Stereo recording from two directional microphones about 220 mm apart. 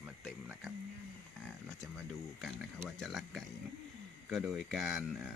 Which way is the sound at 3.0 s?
Centre (ahead or behind).